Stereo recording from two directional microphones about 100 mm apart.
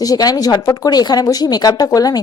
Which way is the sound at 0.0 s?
40° left (ahead or behind).